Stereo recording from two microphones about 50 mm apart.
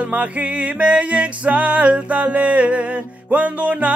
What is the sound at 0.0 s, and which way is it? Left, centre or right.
Music, right.